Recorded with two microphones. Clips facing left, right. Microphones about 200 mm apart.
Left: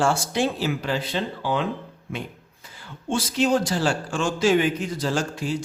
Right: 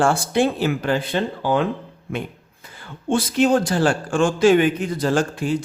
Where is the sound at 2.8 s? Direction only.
55° right (ahead or behind).